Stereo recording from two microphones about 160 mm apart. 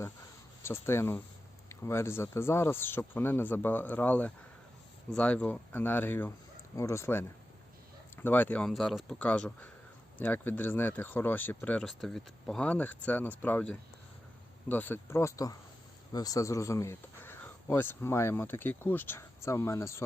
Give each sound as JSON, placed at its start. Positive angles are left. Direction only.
{"t": 0.6, "sound": "speech", "side_deg": 15}